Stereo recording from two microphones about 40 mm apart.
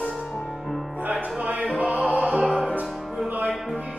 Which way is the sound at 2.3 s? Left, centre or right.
Centre.